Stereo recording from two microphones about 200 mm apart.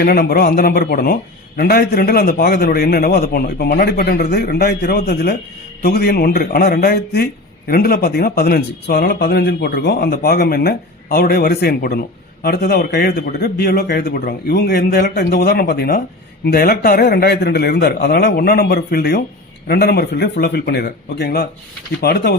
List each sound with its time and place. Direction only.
0.0 s speech: 50° left (ahead or behind)